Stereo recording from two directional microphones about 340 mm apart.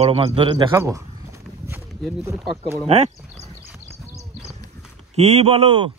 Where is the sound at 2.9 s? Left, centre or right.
Centre.